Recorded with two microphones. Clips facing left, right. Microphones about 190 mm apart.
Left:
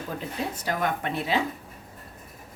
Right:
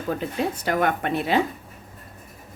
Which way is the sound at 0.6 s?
60° right (ahead or behind).